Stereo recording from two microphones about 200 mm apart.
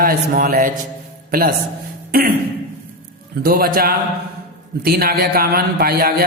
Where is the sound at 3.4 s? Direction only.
50° right (ahead or behind).